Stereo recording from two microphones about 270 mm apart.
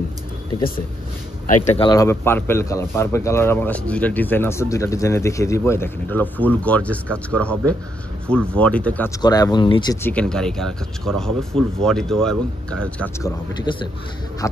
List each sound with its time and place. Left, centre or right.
1.5 s a man's voice: left
10.1 s speech: centre
13.7 s a man's voice: centre